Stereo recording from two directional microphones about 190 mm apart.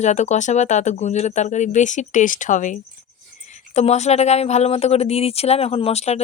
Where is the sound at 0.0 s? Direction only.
40° left (ahead or behind).